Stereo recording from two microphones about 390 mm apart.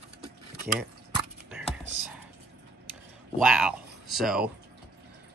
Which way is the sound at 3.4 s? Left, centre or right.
Centre.